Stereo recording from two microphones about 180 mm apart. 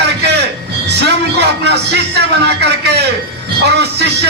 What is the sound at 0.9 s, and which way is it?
Music, 70° right (ahead or behind).